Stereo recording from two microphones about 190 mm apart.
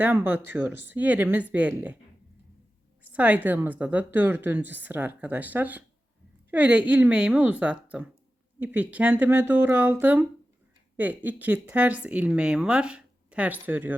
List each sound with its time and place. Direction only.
0.0 s speech: 10° right (ahead or behind)
3.0 s speech: 10° right (ahead or behind)